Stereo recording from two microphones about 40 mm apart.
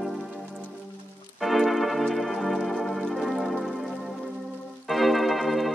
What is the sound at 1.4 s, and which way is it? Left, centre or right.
Organ, centre.